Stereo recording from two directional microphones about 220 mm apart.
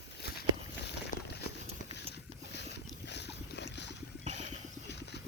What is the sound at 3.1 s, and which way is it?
Boat, 50° left (ahead or behind).